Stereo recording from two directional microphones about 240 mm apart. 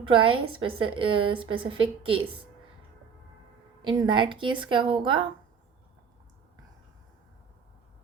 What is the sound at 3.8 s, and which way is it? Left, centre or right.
Speech, centre.